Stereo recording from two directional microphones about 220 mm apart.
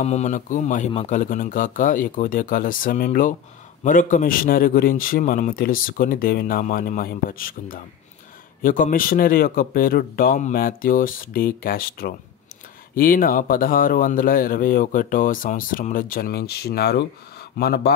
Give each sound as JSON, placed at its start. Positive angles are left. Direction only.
{"t": 0.0, "sound": "speech", "side_deg": 30}